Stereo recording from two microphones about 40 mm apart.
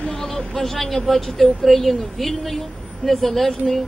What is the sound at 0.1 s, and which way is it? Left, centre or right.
Vehicle, centre.